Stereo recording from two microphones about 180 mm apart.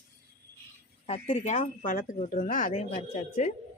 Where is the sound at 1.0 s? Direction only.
35° left (ahead or behind).